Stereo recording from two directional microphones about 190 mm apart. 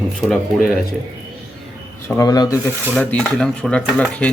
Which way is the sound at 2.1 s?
15° left (ahead or behind).